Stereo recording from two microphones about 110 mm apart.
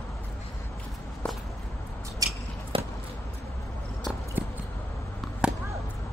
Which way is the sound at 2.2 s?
30° right (ahead or behind).